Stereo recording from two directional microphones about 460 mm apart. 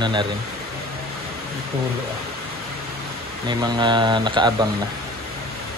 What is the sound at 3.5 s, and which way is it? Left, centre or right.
Speech, centre.